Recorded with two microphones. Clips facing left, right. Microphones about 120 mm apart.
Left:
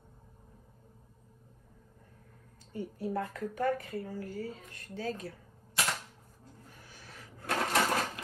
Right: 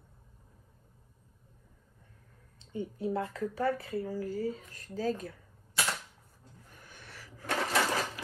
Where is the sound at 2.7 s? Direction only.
25° right (ahead or behind); by 5.2 s 40° right (ahead or behind).